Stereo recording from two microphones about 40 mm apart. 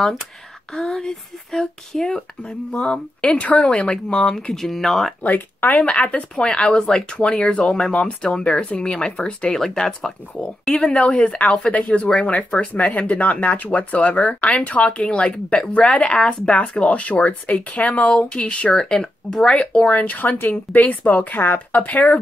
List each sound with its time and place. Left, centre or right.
0.7 s speech: centre
2.9 s speech: left; by 5.1 s centre
5.2 s speech: left
5.9 s speech: left
6.7 s speech: centre
10.4 s speech: left
10.8 s speech: centre
11.1 s speech: left
18.8 s speech: centre
19.6 s speech: left
19.9 s speech: left
20.7 s speech: left